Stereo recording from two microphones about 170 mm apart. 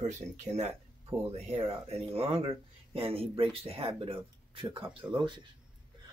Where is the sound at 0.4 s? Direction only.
40° right (ahead or behind).